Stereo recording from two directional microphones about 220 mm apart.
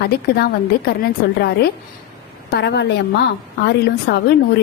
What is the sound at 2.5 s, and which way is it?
A woman's voice, 50° left (ahead or behind).